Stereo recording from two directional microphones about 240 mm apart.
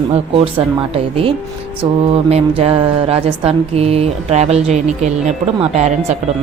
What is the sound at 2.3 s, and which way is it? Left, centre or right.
Speech, right.